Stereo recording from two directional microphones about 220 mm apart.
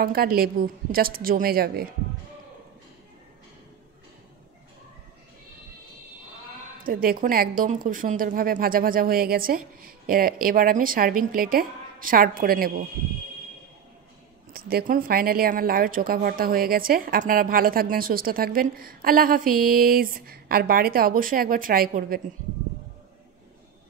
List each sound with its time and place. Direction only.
0.0 s a woman's voice: 45° right (ahead or behind)
6.8 s speech: 40° right (ahead or behind)
14.5 s speech: 45° right (ahead or behind)